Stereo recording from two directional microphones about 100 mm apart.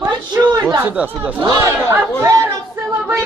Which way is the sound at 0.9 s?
15° right (ahead or behind).